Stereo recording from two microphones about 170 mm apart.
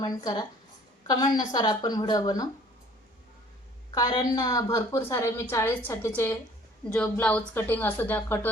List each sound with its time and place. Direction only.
0.0 s speech: 25° left (ahead or behind)
3.9 s a woman's voice: 20° left (ahead or behind)